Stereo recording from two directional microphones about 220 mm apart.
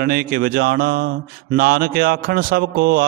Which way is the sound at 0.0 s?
45° right (ahead or behind).